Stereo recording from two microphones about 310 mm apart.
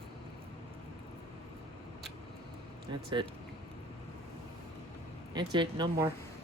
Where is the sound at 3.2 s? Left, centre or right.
Centre.